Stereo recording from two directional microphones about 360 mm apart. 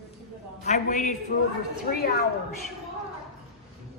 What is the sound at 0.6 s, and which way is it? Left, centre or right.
Speech, centre.